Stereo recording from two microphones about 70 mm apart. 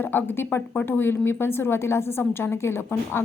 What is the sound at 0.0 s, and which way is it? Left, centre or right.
Speech, left.